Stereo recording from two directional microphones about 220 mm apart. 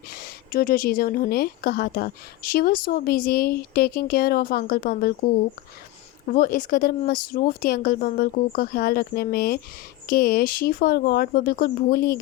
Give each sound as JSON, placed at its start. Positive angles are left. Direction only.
{"t": 0.1, "sound": "a woman's voice", "side_deg": 40}
{"t": 6.3, "sound": "a woman's voice", "side_deg": 40}